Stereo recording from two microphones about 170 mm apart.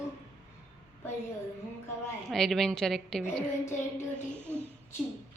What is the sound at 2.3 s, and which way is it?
Speech, 5° left (ahead or behind).